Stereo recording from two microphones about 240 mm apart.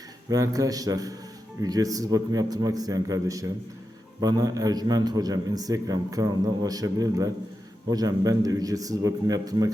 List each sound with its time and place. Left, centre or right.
0.3 s a man's voice: centre